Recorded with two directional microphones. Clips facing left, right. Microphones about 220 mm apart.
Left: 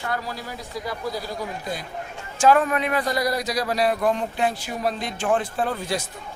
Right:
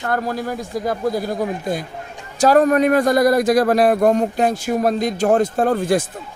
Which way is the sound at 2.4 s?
40° right (ahead or behind).